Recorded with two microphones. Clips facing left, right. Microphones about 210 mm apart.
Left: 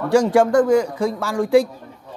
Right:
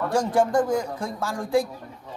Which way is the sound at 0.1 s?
75° left (ahead or behind).